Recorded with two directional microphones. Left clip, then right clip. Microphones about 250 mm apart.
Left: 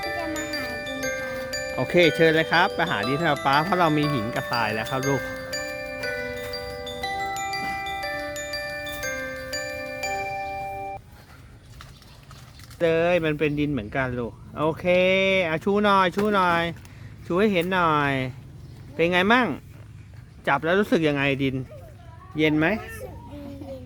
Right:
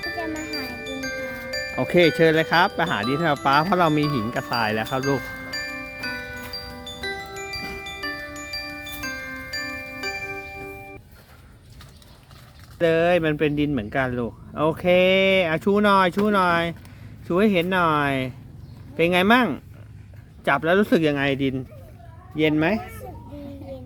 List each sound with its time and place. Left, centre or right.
0.0 s speech: centre
5.1 s glockenspiel: centre
12.8 s speech: centre